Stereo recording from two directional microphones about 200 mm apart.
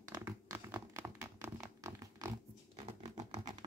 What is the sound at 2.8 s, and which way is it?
Scratch, 30° right (ahead or behind).